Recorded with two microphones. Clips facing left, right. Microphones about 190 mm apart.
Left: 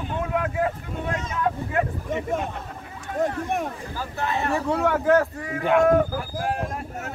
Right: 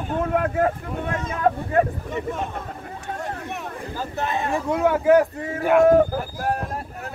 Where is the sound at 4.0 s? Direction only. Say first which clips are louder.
Right 1 dB; 20° right (ahead or behind).